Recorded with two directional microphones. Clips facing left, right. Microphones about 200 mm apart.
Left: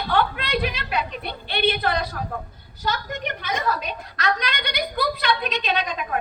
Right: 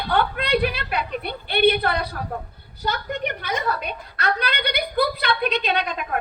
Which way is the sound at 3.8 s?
60° right (ahead or behind).